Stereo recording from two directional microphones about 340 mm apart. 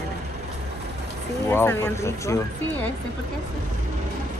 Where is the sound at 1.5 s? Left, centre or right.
Centre.